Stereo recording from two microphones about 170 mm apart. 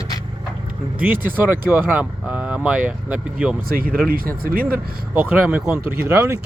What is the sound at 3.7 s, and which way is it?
Speech, 60° right (ahead or behind).